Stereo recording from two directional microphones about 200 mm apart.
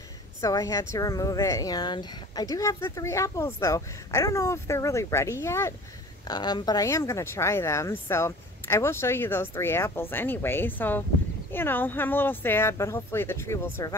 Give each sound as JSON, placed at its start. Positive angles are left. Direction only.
{"t": 0.4, "sound": "speech", "side_deg": 15}